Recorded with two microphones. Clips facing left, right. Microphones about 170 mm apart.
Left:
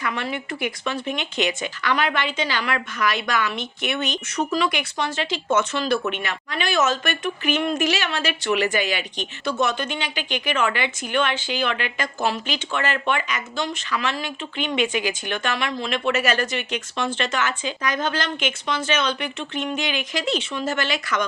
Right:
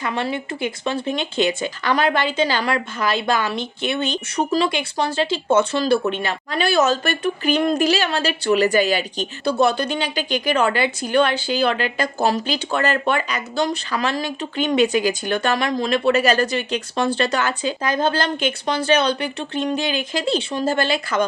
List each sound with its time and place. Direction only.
0.0 s speech: 30° right (ahead or behind)